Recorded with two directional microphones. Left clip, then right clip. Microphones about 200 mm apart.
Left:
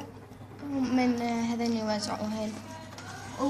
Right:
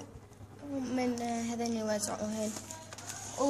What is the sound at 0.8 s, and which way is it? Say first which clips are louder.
A woman's voice: left 6 dB; 30° right (ahead or behind).